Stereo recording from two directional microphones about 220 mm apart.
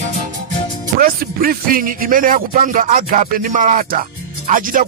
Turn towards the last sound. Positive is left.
turn(degrees=-40)  # may be behind; listen again after turning